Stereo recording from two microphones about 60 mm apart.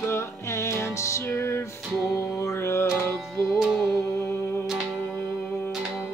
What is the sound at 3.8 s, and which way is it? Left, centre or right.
Music, left.